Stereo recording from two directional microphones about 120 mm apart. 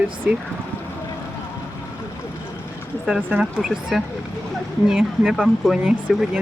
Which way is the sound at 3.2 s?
5° right (ahead or behind).